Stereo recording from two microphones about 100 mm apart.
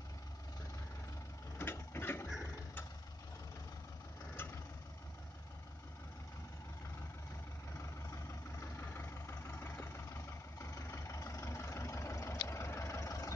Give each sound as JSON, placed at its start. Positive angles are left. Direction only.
{"t": 1.6, "sound": "a sound", "side_deg": 25}
{"t": 4.4, "sound": "vehicle", "side_deg": 25}
{"t": 8.1, "sound": "vehicle", "side_deg": 30}